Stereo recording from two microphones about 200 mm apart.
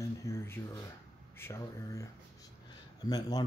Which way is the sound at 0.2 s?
15° left (ahead or behind).